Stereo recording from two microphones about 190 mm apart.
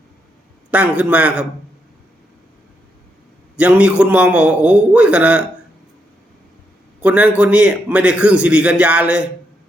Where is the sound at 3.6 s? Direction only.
10° right (ahead or behind).